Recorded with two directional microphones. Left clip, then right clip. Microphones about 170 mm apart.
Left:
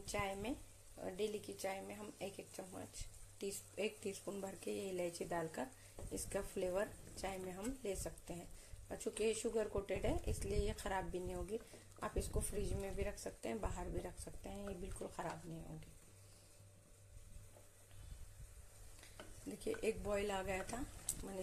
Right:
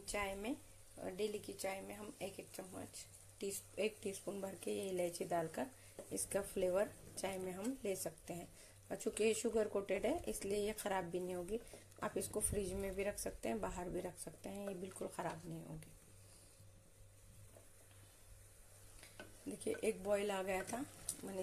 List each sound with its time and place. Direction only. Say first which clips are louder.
0.0 s a woman's voice: even; 5° right (ahead or behind)
19.6 s a woman's voice: right 1 dB; 10° right (ahead or behind)
21.1 s speech: even; centre (ahead or behind)